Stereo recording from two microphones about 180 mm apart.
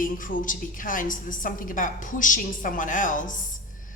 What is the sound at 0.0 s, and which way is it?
A woman's voice, 50° left (ahead or behind).